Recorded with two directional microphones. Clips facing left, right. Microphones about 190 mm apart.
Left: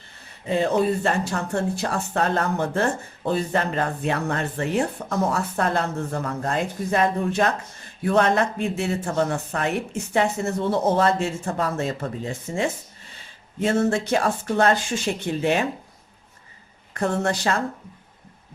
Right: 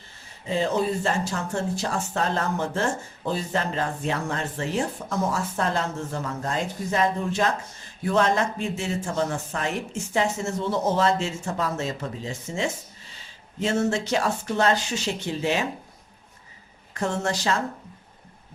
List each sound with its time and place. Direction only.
0.4 s speech: 60° left (ahead or behind)
16.9 s speech: 60° left (ahead or behind)